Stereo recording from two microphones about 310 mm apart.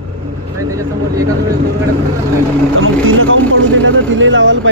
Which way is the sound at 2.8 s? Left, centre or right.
Right.